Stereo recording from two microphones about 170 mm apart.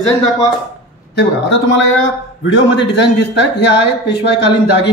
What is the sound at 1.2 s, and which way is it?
Speech, 90° left.